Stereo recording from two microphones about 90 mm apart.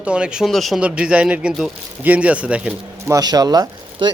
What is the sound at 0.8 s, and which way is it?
A man's voice, 15° right (ahead or behind).